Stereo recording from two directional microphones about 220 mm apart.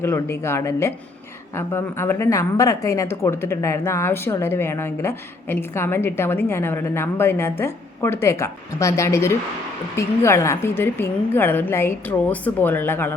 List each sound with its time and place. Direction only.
0.0 s speech: 10° left (ahead or behind)